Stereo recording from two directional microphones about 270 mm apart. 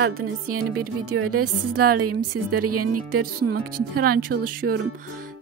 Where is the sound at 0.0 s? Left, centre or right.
Right.